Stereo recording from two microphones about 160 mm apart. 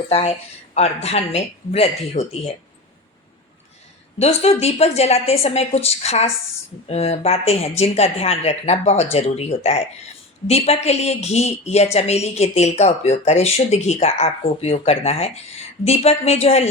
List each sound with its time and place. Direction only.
0.1 s speech: 40° left (ahead or behind)
4.2 s speech: 40° left (ahead or behind)